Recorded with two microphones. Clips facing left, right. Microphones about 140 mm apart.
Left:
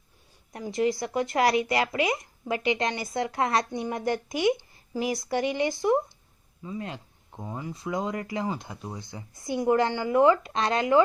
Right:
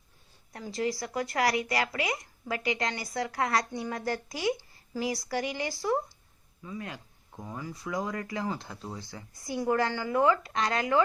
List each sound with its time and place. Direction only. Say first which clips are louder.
0.5 s speech: left 5 dB; 20° left (ahead or behind)